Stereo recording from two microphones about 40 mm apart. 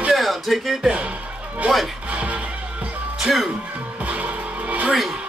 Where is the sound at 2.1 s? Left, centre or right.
Right.